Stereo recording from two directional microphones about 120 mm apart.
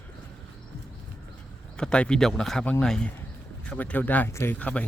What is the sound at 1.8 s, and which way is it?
Speech, 10° left (ahead or behind).